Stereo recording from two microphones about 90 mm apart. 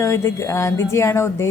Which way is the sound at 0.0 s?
30° left (ahead or behind).